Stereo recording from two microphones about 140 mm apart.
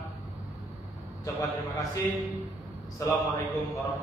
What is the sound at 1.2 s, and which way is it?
Speech, 25° left (ahead or behind).